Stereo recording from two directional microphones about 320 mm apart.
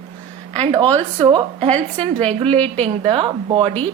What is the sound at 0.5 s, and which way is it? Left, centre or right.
A woman's voice, centre.